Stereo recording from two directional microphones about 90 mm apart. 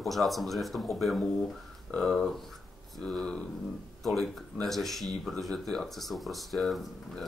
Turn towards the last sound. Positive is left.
turn(degrees=0)  # may be behind; listen again after turning